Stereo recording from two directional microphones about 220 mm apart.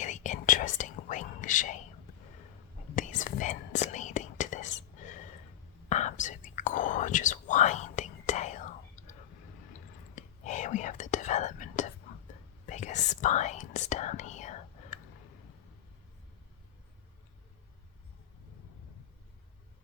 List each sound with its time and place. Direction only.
0.0 s whispering: 35° left (ahead or behind)
2.9 s whispering: 35° left (ahead or behind)
4.9 s a sound: 35° left (ahead or behind)
5.9 s whispering: 35° left (ahead or behind)
10.2 s whispering: 30° left (ahead or behind)